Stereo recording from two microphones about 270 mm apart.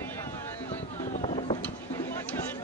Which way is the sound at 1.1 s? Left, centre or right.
Left.